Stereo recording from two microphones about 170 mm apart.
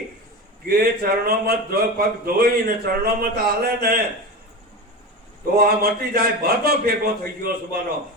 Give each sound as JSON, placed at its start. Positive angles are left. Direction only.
{"t": 0.7, "sound": "a man's voice", "side_deg": -65}
{"t": 5.5, "sound": "a man's voice", "side_deg": -65}